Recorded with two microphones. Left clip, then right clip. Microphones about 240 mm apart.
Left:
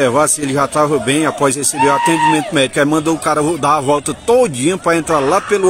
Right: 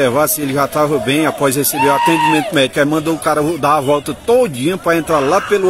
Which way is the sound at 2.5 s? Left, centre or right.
Centre.